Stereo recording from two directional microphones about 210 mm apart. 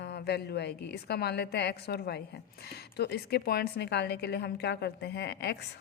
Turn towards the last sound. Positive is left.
turn(degrees=50)  # may be behind; listen again after turning